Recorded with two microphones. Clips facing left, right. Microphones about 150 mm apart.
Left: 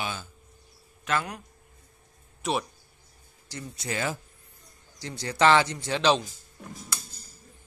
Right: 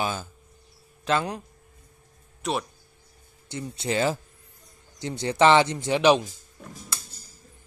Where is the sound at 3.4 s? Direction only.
25° right (ahead or behind).